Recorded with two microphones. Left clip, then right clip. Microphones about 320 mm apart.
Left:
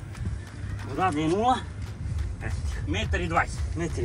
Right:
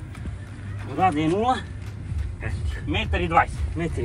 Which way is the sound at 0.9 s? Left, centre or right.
Centre.